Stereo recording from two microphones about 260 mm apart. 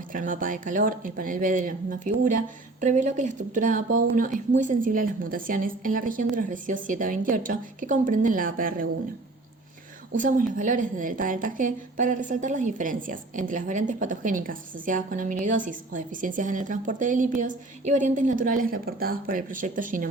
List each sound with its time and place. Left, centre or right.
0.1 s speech: right
10.2 s a woman's voice: right